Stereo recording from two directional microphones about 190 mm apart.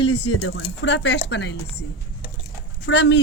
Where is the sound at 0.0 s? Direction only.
70° left (ahead or behind).